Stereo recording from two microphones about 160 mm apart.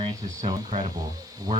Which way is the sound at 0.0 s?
20° right (ahead or behind).